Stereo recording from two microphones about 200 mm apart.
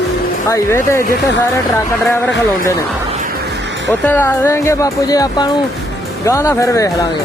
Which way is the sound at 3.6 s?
65° right (ahead or behind).